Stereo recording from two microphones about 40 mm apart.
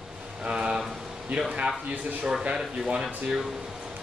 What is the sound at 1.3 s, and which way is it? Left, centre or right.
Speech, right.